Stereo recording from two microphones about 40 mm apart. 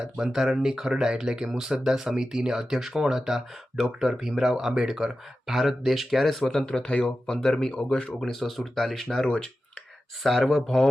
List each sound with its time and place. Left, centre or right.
0.0 s speech: centre
6.5 s speech: centre
7.4 s speech: centre
7.7 s speech: left
8.2 s speech: centre
10.2 s speech: centre